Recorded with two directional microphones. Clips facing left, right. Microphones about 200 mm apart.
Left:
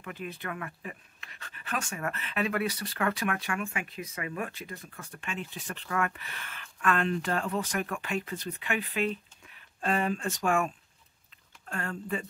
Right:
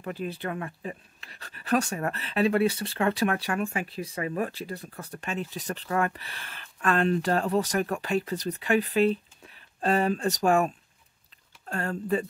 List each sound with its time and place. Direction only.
0.0 s speech: 35° right (ahead or behind)
11.7 s speech: 35° right (ahead or behind)